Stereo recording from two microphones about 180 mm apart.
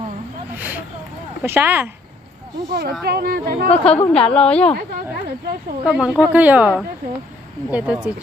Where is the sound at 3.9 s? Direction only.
5° left (ahead or behind).